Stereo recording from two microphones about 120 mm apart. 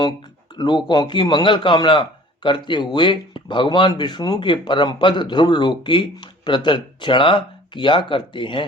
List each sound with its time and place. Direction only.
0.9 s a man's voice: 40° left (ahead or behind)